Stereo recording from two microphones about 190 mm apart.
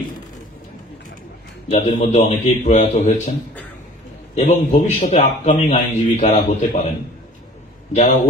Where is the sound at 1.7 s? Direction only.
40° left (ahead or behind).